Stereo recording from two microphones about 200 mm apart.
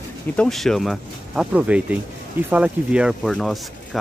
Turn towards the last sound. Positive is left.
turn(degrees=0)  # may be behind; listen again after turning